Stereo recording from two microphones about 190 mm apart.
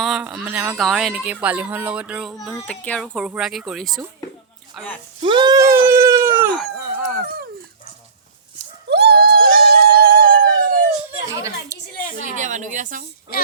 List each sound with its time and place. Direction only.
0.0 s speech: centre (ahead or behind)
5.2 s sheep: 25° right (ahead or behind)
8.9 s a sound: 55° right (ahead or behind)
12.4 s a woman's voice: 40° right (ahead or behind)